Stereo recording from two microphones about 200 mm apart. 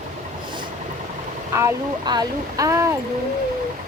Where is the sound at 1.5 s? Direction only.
15° right (ahead or behind).